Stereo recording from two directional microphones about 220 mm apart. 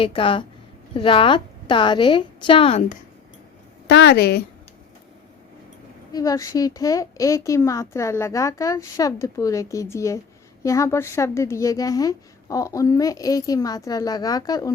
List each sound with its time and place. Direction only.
0.0 s a woman's voice: 25° left (ahead or behind)
3.8 s a woman's voice: 50° left (ahead or behind)
6.1 s a woman's voice: 15° left (ahead or behind)